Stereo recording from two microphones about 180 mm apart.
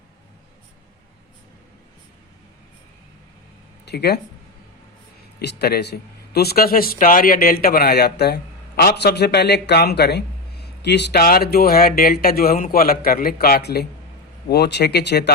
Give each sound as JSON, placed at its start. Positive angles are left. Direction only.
{"t": 3.8, "sound": "speech", "side_deg": 65}
{"t": 5.4, "sound": "speech", "side_deg": 65}